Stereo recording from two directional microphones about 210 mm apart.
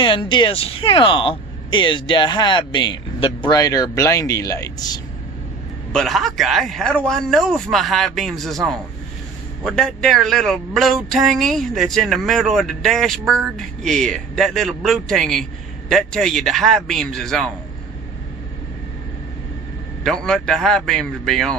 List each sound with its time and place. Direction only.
0.0 s speech: 25° left (ahead or behind)
5.9 s speech: centre (ahead or behind)
20.1 s speech: centre (ahead or behind)